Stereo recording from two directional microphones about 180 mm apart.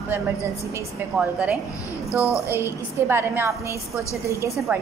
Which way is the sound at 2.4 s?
15° right (ahead or behind).